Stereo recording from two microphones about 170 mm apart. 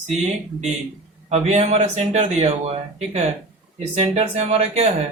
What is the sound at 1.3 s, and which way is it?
Speech, 40° right (ahead or behind).